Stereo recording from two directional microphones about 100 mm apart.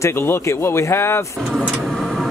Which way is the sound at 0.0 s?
25° left (ahead or behind).